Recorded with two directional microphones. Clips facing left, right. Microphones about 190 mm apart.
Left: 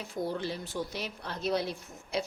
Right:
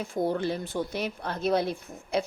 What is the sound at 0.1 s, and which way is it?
Speech, 55° right (ahead or behind).